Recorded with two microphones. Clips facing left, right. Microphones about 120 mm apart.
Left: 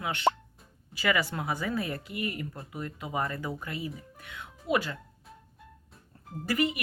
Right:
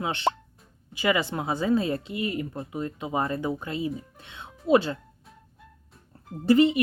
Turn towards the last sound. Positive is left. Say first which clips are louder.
# right 10 dB
turn(degrees=-25)  # may be behind; listen again after turning